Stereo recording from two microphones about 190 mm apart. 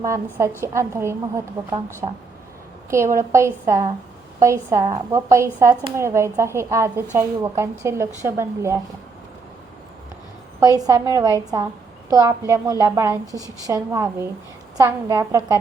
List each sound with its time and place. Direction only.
0.0 s speech: 15° right (ahead or behind)
2.9 s speech: 15° right (ahead or behind)
10.6 s a woman's voice: 20° right (ahead or behind)